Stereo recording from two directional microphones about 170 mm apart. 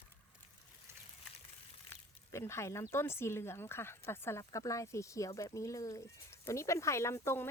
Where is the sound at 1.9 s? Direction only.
15° left (ahead or behind).